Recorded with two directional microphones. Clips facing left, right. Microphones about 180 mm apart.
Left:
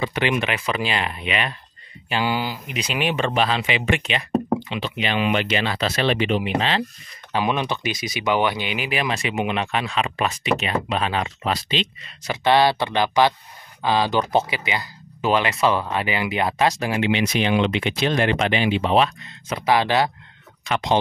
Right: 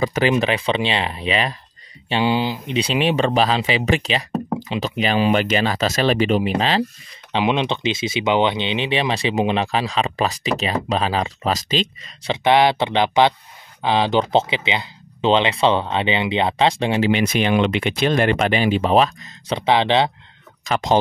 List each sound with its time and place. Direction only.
0.0 s speech: 45° right (ahead or behind)
0.3 s speech: 30° right (ahead or behind)
7.3 s speech: 20° right (ahead or behind); by 11.9 s 40° right (ahead or behind)
12.3 s speech: 20° right (ahead or behind)
17.1 s speech: 55° right (ahead or behind)
19.5 s speech: 25° right (ahead or behind)
20.6 s speech: 40° right (ahead or behind)